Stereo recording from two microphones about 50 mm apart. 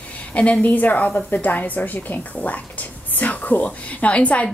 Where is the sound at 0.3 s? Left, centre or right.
Left.